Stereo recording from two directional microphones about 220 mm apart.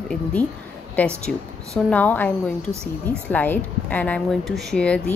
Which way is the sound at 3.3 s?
5° left (ahead or behind).